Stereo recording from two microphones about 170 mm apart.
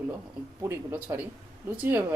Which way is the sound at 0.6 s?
15° right (ahead or behind).